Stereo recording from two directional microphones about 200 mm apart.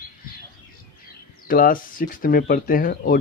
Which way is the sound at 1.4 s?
45° left (ahead or behind).